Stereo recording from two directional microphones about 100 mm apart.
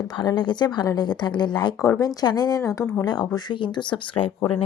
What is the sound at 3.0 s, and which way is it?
A woman's voice, 45° left (ahead or behind).